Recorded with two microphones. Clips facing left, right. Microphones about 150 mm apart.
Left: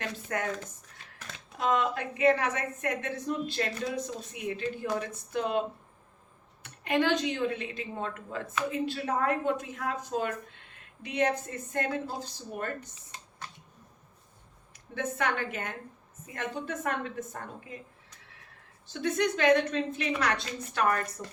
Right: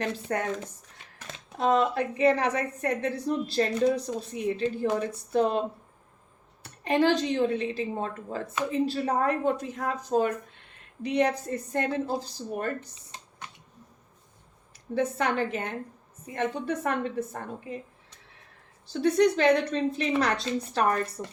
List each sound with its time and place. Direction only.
0.0 s a woman's voice: 30° right (ahead or behind)
1.5 s a woman's voice: 30° right (ahead or behind)
14.9 s a woman's voice: 35° right (ahead or behind)
19.0 s a woman's voice: 35° right (ahead or behind)